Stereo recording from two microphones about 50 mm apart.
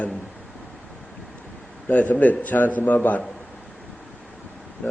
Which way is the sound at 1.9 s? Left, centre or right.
Left.